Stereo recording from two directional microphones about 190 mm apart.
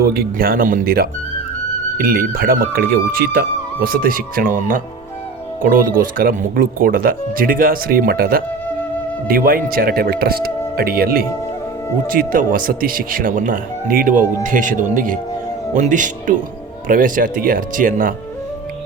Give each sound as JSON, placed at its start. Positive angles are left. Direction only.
{"t": 0.0, "sound": "speech", "side_deg": -55}